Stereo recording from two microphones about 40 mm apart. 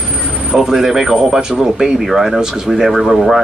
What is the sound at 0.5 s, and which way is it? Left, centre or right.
Speech, centre.